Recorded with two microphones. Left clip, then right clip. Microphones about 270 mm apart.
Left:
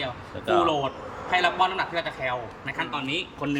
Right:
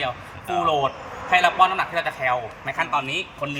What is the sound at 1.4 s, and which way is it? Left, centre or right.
A man's voice, centre.